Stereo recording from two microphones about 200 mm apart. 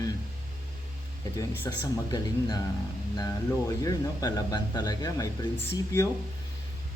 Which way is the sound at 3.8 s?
20° left (ahead or behind).